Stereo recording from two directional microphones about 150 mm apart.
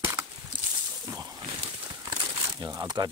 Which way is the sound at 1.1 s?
25° right (ahead or behind).